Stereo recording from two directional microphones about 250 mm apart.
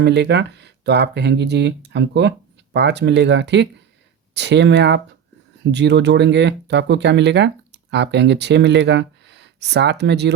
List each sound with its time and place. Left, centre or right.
0.0 s speech: right